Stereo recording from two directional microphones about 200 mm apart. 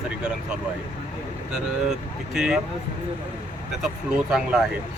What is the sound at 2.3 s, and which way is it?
Speech, 5° right (ahead or behind).